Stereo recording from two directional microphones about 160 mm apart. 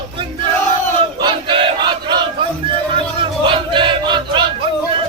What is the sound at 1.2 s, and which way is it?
Battle cry, 30° right (ahead or behind).